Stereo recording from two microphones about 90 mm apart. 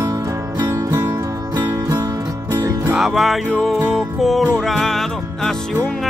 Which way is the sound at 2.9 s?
5° right (ahead or behind).